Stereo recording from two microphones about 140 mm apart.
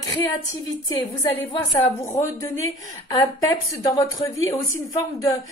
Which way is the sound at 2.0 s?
20° left (ahead or behind).